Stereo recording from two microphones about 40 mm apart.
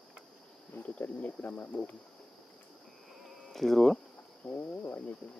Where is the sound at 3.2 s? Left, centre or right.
Centre.